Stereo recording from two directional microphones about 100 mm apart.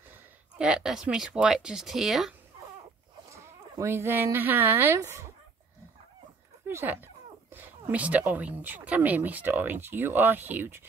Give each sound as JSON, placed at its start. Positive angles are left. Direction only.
{"t": 0.6, "sound": "speech", "side_deg": -10}
{"t": 3.7, "sound": "speech", "side_deg": -25}
{"t": 6.7, "sound": "dog", "side_deg": -20}
{"t": 7.9, "sound": "speech", "side_deg": -15}